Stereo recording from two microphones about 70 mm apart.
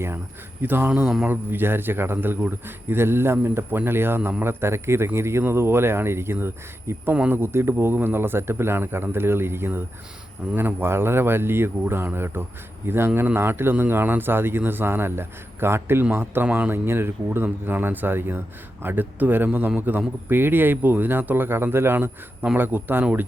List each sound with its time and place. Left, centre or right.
0.6 s speech: right
1.0 s a man's voice: centre
1.3 s speech: right
7.1 s speech: right
7.3 s speech: right
16.5 s speech: right
16.7 s speech: right